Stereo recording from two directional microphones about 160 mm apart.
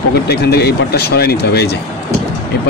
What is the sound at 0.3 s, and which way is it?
Speech, 90° left.